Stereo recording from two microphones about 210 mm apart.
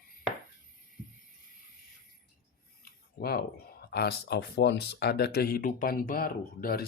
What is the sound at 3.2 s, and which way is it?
Speech, 45° left (ahead or behind).